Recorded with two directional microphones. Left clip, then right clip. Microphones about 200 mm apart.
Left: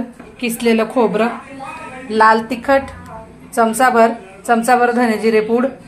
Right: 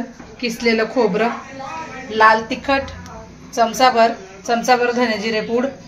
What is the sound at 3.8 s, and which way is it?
A woman's voice, 25° left (ahead or behind).